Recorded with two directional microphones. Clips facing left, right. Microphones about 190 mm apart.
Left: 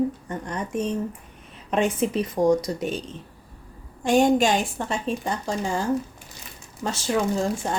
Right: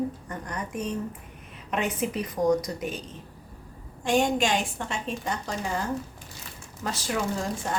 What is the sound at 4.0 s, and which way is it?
A woman's voice, 40° left (ahead or behind).